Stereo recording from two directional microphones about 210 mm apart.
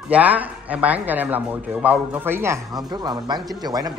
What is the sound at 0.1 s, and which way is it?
Speech, 5° right (ahead or behind).